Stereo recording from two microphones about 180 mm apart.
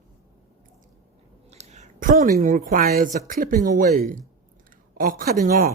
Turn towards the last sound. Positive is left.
turn(degrees=-50)  # may be behind; listen again after turning